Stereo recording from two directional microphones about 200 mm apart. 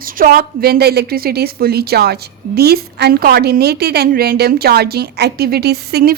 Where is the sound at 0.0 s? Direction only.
45° right (ahead or behind).